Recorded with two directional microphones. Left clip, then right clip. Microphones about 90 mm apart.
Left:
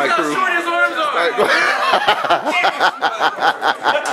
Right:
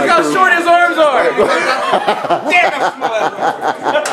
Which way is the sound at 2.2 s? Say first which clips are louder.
Right 4 dB; 55° left (ahead or behind).